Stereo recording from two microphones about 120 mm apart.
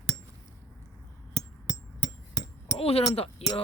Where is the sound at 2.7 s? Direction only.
55° left (ahead or behind).